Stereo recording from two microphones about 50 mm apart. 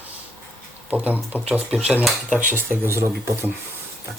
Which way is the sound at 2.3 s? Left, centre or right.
Right.